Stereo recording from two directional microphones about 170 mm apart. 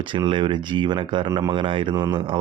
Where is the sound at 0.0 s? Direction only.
30° right (ahead or behind).